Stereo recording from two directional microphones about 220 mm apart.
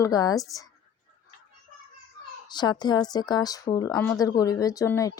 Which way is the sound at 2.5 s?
20° left (ahead or behind).